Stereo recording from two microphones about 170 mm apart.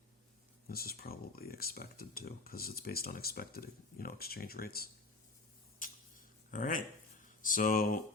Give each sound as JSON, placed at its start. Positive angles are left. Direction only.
{"t": 0.7, "sound": "speech", "side_deg": 60}
{"t": 5.8, "sound": "a sound", "side_deg": 50}
{"t": 7.4, "sound": "speech", "side_deg": 55}